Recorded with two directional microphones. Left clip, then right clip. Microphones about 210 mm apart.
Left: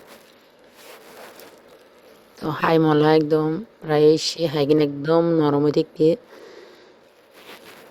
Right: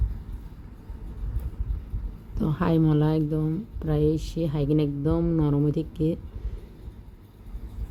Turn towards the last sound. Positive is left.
turn(degrees=15)  # may be behind; listen again after turning